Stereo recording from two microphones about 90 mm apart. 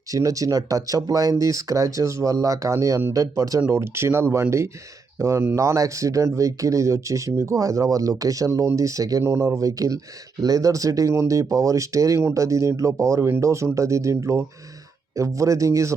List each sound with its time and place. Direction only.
0.1 s speech: 40° right (ahead or behind)
9.2 s speech: 30° right (ahead or behind)